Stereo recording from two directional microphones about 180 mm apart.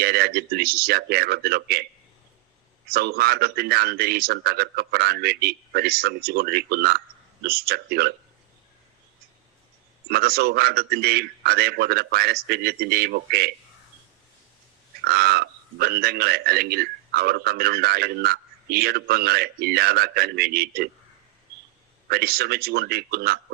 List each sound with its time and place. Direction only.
0.0 s a man's voice: 60° right (ahead or behind)
2.9 s a man's voice: 60° right (ahead or behind)
10.1 s a man's voice: 60° right (ahead or behind)
15.0 s a man's voice: 60° right (ahead or behind)
22.1 s a man's voice: 60° right (ahead or behind)